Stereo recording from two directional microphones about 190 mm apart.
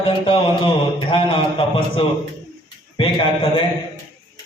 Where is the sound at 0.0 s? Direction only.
25° left (ahead or behind).